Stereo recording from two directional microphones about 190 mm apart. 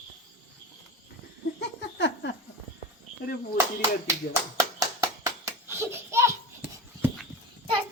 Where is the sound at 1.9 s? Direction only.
65° left (ahead or behind).